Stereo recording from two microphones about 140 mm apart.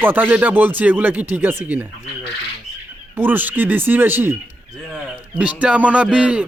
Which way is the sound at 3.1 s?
15° right (ahead or behind).